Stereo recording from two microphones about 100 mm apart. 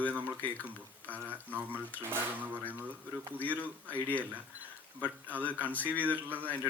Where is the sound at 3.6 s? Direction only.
15° left (ahead or behind).